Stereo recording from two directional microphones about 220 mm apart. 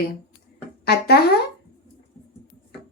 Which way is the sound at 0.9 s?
45° left (ahead or behind).